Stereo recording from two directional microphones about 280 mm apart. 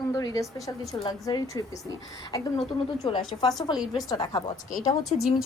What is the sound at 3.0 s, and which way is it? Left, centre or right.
A woman's voice, centre.